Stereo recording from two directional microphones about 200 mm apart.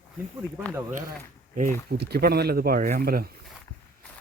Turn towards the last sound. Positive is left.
turn(degrees=-50)  # may be behind; listen again after turning